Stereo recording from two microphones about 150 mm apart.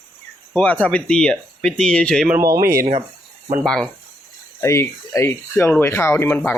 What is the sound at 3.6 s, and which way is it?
Speech, 5° left (ahead or behind).